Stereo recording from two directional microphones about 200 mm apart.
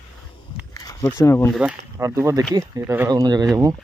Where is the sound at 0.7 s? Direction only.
15° left (ahead or behind).